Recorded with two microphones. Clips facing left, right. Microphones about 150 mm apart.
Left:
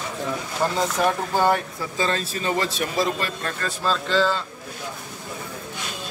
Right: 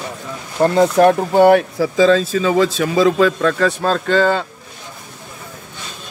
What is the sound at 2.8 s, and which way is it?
A man's voice, 90° right.